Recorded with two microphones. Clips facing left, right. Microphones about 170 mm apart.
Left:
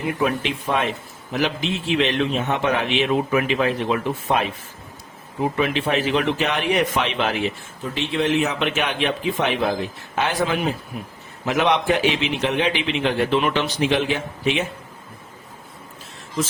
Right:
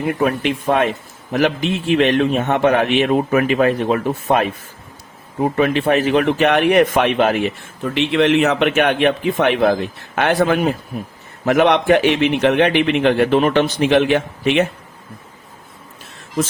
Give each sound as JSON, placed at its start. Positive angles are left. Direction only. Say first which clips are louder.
{"t": 0.1, "sound": "a man's voice", "louder": "right 4 dB", "side_deg": -50}
{"t": 7.9, "sound": "a man's voice", "louder": "right 6 dB", "side_deg": -70}